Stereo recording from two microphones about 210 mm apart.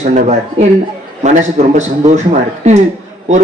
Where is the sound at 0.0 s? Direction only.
35° right (ahead or behind).